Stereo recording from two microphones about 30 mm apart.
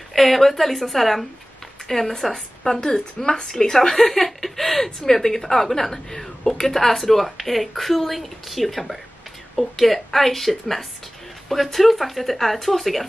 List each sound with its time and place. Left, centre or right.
0.1 s speech: centre
2.8 s a woman's voice: centre